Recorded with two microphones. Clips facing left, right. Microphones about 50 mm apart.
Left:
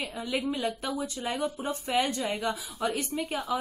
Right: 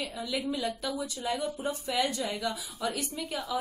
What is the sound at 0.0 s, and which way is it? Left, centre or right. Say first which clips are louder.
Speech: left 2 dB; left.